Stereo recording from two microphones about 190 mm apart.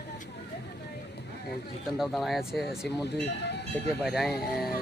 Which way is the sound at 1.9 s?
Centre (ahead or behind).